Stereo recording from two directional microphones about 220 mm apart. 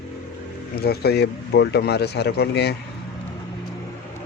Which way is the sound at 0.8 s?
45° left (ahead or behind).